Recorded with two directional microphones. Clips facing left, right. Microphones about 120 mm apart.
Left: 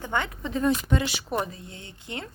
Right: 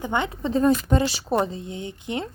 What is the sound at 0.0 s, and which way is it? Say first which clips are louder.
Speech: right 4 dB; 20° right (ahead or behind).